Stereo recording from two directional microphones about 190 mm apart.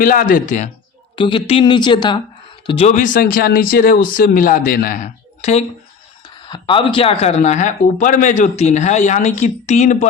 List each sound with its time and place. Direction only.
0.0 s speech: 45° left (ahead or behind)
1.1 s a woman's voice: 25° left (ahead or behind)
2.9 s speech: 45° left (ahead or behind)
6.2 s speech: 25° left (ahead or behind)